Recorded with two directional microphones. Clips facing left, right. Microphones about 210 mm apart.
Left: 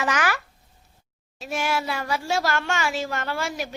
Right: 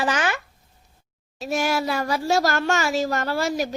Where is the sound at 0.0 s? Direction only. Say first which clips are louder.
Right 1 dB; 30° right (ahead or behind).